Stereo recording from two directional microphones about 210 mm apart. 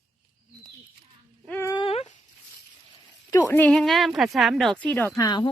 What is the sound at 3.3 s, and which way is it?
Speech, 10° left (ahead or behind).